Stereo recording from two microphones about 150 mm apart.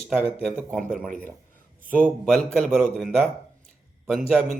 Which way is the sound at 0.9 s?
65° right (ahead or behind).